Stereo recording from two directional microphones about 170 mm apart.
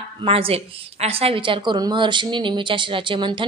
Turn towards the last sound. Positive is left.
turn(degrees=-30)  # may be behind; listen again after turning